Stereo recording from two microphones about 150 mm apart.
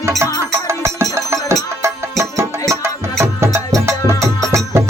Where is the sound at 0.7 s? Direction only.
15° right (ahead or behind).